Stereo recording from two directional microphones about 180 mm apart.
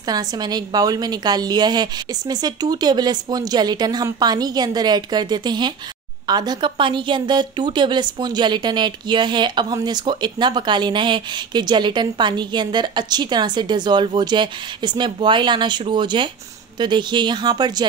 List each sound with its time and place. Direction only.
0.0 s a woman's voice: 20° right (ahead or behind)